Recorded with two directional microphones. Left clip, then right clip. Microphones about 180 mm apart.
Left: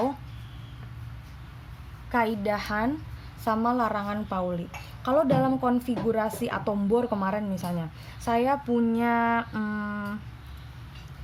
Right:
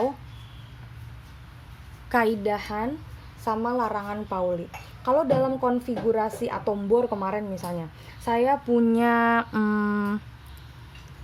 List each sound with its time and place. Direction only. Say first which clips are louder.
2.0 s a woman's voice: right 3 dB; 35° right (ahead or behind)
2.4 s a woman's voice: even; 10° right (ahead or behind)
8.7 s a sound: right 4 dB; 35° right (ahead or behind)